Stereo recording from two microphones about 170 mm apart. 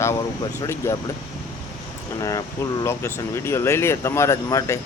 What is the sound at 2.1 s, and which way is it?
Speech, 20° left (ahead or behind).